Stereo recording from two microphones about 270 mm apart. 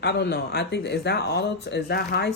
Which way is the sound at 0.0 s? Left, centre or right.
Left.